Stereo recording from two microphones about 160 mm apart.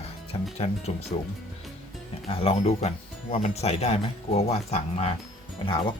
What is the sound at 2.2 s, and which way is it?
Speech, 40° left (ahead or behind).